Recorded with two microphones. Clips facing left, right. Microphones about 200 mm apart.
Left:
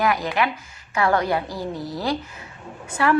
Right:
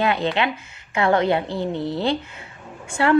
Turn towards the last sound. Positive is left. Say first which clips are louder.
# right 2 dB
turn(degrees=-25)  # may be behind; listen again after turning